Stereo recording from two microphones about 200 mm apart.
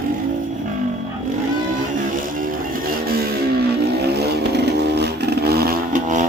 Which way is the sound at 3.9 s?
55° right (ahead or behind).